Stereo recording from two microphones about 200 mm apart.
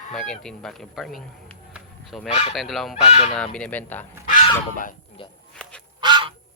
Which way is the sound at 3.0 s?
35° left (ahead or behind).